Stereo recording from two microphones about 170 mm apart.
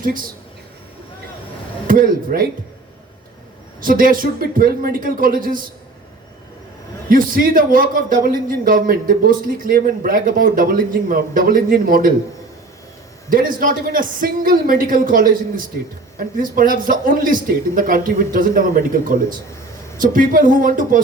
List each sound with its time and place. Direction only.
0.0 s a man's voice: 55° right (ahead or behind)
1.9 s a man's voice: 55° right (ahead or behind)
3.8 s a man's voice: 55° right (ahead or behind)
7.1 s a man's voice: 55° right (ahead or behind)
13.3 s a man's voice: 55° right (ahead or behind)